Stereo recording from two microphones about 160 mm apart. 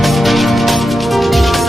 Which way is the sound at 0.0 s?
Centre (ahead or behind).